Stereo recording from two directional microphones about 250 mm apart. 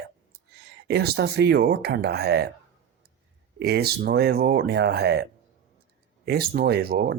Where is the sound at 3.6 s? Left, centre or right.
Right.